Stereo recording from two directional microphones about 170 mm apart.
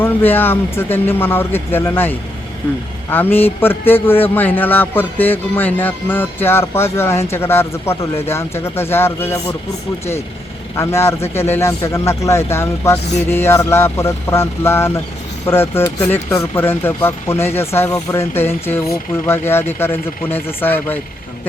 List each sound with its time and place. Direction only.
0.0 s a man's voice: 10° left (ahead or behind)
10.8 s a man's voice: 15° left (ahead or behind)